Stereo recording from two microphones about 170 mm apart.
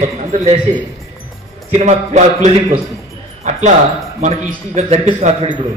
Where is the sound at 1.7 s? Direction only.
40° right (ahead or behind).